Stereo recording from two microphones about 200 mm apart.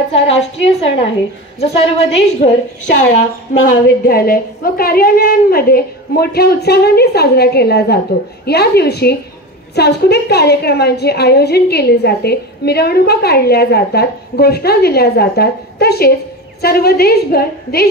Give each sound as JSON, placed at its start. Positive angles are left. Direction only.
{"t": 0.1, "sound": "a woman's voice", "side_deg": 30}